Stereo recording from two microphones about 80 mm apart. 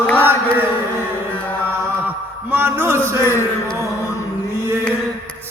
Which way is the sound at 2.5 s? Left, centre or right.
Right.